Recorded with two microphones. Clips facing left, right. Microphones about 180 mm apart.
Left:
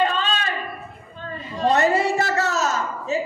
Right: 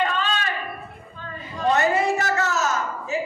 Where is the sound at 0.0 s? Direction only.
30° left (ahead or behind).